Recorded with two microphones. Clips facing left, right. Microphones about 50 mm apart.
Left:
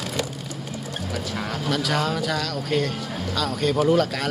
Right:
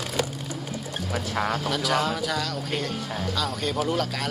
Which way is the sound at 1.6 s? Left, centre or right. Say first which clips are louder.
Left 1 dB; centre.